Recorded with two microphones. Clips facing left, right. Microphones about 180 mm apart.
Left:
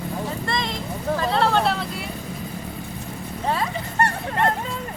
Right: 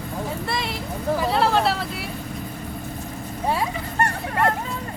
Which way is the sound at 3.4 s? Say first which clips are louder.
Right 1 dB; 10° right (ahead or behind).